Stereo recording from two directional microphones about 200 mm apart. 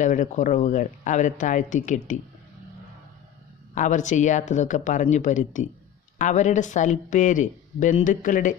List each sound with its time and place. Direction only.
0.0 s speech: 40° left (ahead or behind)
3.7 s speech: 40° left (ahead or behind)